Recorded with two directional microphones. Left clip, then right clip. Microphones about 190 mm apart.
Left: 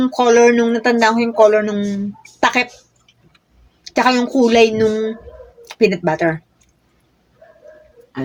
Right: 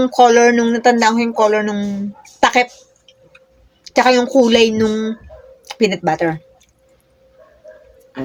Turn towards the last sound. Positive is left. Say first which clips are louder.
# even
turn(degrees=-25)  # may be behind; listen again after turning